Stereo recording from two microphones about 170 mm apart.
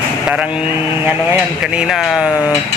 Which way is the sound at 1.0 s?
10° right (ahead or behind).